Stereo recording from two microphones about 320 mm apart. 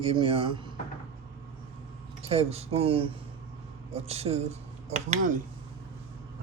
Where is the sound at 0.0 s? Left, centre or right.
Centre.